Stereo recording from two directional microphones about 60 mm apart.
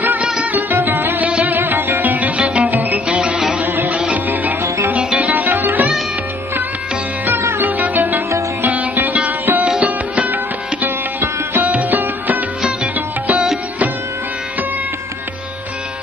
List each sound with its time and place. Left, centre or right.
0.2 s music: centre
0.6 s music: right
2.7 s music: right
3.1 s music: centre
3.6 s music: right
3.9 s music: right
7.2 s sitar: right
7.7 s music: right
12.6 s music: centre